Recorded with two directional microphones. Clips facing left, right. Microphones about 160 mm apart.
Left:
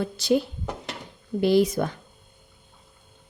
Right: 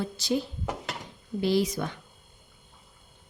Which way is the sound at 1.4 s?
55° left (ahead or behind).